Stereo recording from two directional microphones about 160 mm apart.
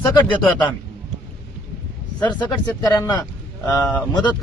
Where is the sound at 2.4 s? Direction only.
25° left (ahead or behind).